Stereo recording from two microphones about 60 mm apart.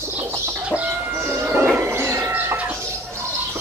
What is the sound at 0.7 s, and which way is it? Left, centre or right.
Bird, right.